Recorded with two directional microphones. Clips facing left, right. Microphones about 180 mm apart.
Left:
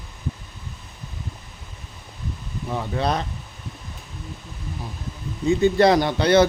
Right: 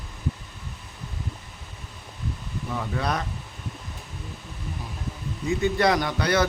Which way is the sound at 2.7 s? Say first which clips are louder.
Left 4 dB; 25° left (ahead or behind).